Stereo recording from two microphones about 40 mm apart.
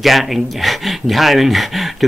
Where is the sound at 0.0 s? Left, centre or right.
Centre.